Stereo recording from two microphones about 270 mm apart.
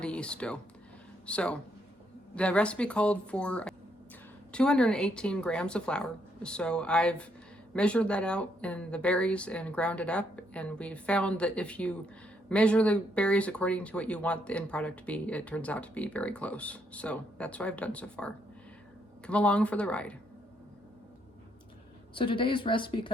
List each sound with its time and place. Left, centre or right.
0.0 s speech: centre
22.1 s a woman's voice: centre